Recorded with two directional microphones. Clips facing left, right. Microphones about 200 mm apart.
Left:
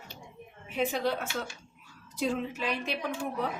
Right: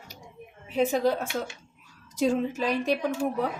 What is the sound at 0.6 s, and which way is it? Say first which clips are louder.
A woman's voice: right 6 dB; 40° right (ahead or behind).